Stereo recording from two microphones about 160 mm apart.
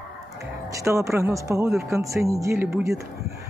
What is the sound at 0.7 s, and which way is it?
Speech, 20° right (ahead or behind).